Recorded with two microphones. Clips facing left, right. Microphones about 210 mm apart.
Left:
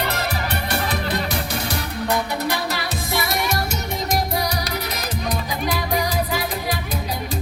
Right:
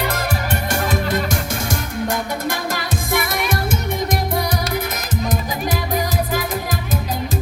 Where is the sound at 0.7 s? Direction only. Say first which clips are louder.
Right 4 dB; 45° right (ahead or behind).